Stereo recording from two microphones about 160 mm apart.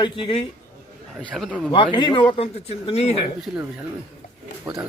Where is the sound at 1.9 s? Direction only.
30° left (ahead or behind).